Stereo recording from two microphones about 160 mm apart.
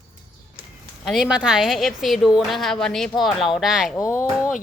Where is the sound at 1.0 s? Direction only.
Centre (ahead or behind).